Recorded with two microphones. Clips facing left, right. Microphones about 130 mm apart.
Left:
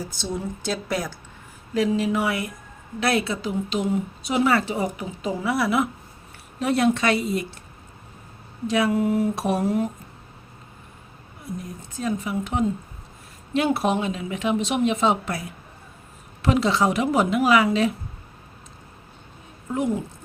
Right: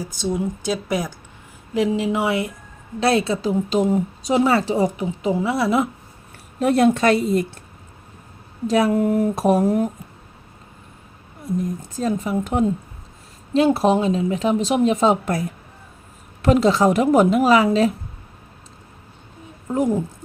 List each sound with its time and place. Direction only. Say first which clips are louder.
0.2 s a woman's voice: right 8 dB; 10° right (ahead or behind); by 5.9 s 35° right (ahead or behind)
6.6 s speech: right 5 dB; 45° right (ahead or behind)
8.6 s speech: right 4 dB; 40° right (ahead or behind)
11.9 s speech: right 4 dB; 40° right (ahead or behind)
13.5 s speech: right 5 dB; 30° right (ahead or behind)